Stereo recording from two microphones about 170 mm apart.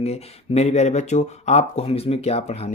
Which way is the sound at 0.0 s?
40° left (ahead or behind).